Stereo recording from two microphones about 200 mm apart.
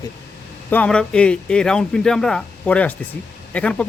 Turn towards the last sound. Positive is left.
turn(degrees=5)  # may be behind; listen again after turning